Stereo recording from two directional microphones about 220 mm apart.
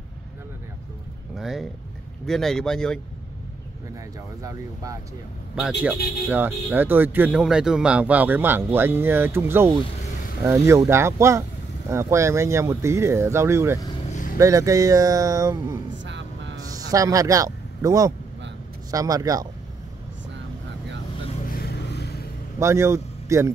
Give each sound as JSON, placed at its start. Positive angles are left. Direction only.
{"t": 1.3, "sound": "speech", "side_deg": 0}
{"t": 4.4, "sound": "speech", "side_deg": -15}
{"t": 5.6, "sound": "speech", "side_deg": -5}
{"t": 16.0, "sound": "vehicle", "side_deg": -55}
{"t": 16.9, "sound": "speech", "side_deg": -15}
{"t": 21.5, "sound": "a sound", "side_deg": 45}
{"t": 22.6, "sound": "a man's voice", "side_deg": -10}